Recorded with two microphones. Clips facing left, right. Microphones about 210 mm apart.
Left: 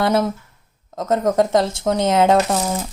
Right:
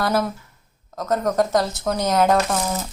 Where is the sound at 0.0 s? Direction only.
25° left (ahead or behind).